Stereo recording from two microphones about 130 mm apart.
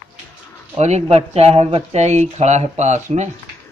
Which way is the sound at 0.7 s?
60° right (ahead or behind).